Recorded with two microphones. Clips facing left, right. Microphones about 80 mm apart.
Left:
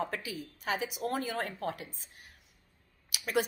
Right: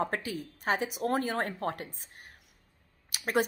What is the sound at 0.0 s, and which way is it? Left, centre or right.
Speech, right.